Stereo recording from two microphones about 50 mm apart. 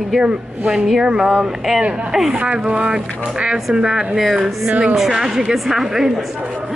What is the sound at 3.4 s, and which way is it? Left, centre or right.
Speech, centre.